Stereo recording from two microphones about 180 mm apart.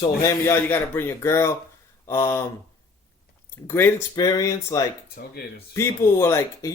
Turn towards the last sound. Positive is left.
turn(degrees=15)  # may be behind; listen again after turning